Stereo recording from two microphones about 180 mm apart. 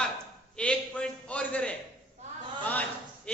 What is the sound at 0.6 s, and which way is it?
A man's voice, 5° left (ahead or behind).